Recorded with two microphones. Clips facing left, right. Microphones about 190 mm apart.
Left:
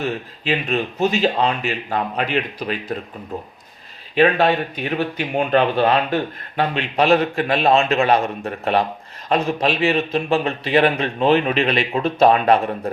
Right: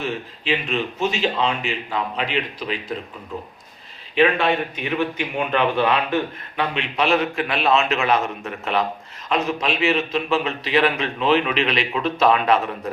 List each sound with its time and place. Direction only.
0.0 s speech: 40° left (ahead or behind)
4.1 s speech: 40° left (ahead or behind)
10.1 s speech: 50° left (ahead or behind)